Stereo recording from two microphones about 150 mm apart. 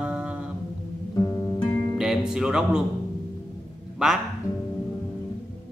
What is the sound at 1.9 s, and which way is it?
Music, 5° right (ahead or behind).